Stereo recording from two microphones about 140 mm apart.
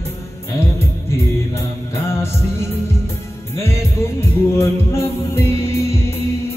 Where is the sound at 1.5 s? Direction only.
20° left (ahead or behind).